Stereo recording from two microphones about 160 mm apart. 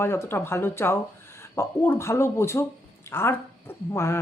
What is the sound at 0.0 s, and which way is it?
Speech, 15° left (ahead or behind).